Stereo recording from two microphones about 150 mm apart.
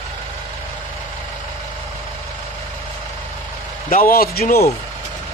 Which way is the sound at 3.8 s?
70° left (ahead or behind).